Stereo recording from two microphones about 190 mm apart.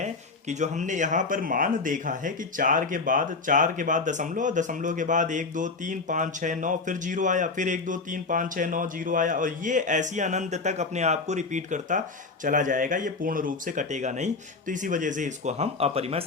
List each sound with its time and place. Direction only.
0.0 s speech: 40° right (ahead or behind)